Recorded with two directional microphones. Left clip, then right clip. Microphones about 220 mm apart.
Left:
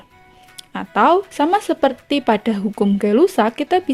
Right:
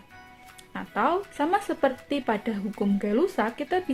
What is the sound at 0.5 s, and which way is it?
Speech, 45° left (ahead or behind).